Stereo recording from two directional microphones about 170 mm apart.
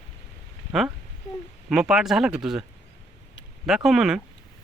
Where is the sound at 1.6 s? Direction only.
5° right (ahead or behind).